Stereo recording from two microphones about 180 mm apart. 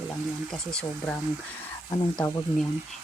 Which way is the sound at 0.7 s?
5° left (ahead or behind).